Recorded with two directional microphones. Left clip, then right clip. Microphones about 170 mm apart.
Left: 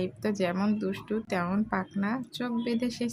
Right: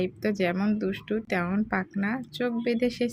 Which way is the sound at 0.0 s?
15° right (ahead or behind).